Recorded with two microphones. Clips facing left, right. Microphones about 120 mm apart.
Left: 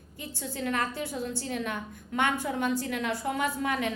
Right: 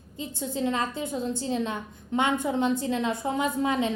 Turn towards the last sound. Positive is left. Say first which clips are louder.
# right 4 dB
turn(degrees=-20)  # may be behind; listen again after turning